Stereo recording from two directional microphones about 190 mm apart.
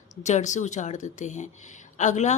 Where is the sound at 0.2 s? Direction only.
35° left (ahead or behind).